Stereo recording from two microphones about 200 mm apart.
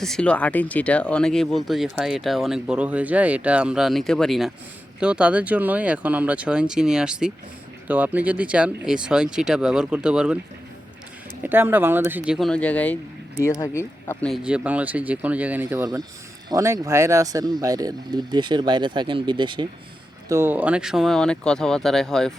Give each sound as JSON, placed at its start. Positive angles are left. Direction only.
{"t": 0.0, "sound": "speech", "side_deg": 5}
{"t": 11.4, "sound": "speech", "side_deg": -10}
{"t": 14.3, "sound": "speech", "side_deg": 0}
{"t": 20.2, "sound": "speech", "side_deg": -15}